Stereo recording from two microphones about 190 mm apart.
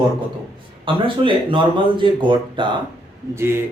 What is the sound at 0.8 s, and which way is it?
Speech, 25° right (ahead or behind).